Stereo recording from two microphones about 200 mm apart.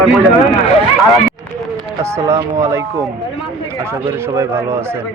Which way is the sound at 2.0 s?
15° right (ahead or behind).